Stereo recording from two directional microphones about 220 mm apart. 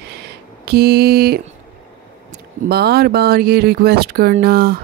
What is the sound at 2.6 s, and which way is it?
Speech, 45° right (ahead or behind).